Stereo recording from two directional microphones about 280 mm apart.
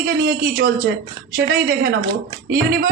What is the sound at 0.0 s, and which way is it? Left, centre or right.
Speech, right.